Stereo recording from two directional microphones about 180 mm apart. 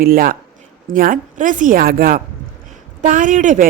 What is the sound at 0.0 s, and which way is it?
A woman's voice, 55° right (ahead or behind).